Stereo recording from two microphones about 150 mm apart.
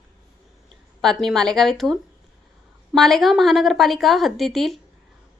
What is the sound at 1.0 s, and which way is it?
A woman's voice, centre (ahead or behind).